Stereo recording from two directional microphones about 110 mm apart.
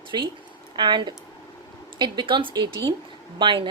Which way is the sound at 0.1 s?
40° right (ahead or behind).